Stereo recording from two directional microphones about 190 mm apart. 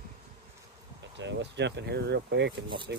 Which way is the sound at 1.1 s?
70° right (ahead or behind).